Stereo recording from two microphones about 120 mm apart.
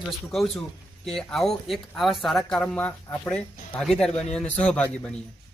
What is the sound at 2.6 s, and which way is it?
Speech, 10° left (ahead or behind).